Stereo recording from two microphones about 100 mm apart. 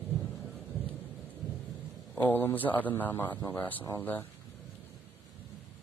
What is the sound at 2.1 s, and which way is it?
A man's voice, 20° left (ahead or behind).